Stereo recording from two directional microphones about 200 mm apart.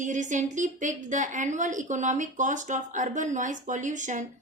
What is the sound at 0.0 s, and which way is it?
A woman's voice, 40° right (ahead or behind).